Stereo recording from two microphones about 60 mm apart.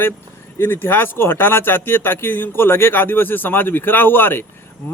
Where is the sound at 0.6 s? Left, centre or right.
Left.